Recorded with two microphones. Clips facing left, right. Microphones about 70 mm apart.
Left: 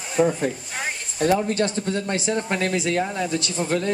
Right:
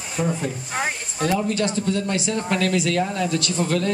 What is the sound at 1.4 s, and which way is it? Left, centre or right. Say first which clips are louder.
Speech: right 1 dB; left.